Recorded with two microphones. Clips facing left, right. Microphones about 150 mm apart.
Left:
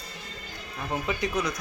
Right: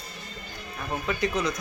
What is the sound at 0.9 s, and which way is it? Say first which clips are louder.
Speech: even; 15° left (ahead or behind).